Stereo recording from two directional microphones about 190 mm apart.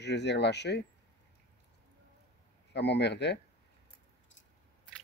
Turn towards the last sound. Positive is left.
turn(degrees=65)  # may be behind; listen again after turning